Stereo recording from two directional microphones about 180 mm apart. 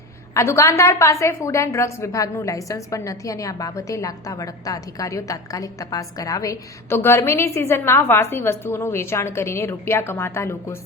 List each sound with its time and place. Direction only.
0.3 s a woman's voice: 15° left (ahead or behind)